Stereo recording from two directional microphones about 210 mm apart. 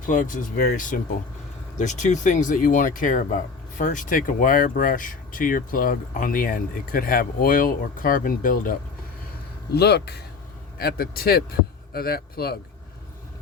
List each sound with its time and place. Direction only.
0.0 s speech: 40° left (ahead or behind)
9.7 s a man's voice: 50° left (ahead or behind)